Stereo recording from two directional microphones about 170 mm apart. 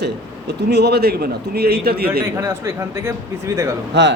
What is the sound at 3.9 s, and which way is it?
Speech, 90° right.